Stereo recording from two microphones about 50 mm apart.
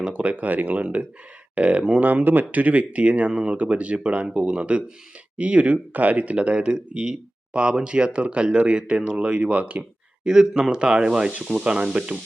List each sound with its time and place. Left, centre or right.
0.1 s speech: right
2.0 s speech: right
10.2 s speech: centre